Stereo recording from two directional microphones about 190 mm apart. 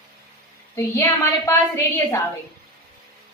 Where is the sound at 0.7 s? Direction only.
15° left (ahead or behind).